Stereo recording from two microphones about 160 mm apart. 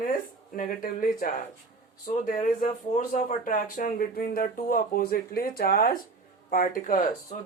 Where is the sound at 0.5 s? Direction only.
55° left (ahead or behind).